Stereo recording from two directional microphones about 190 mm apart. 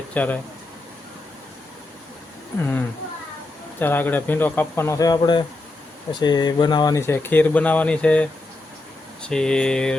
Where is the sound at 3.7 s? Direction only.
10° left (ahead or behind).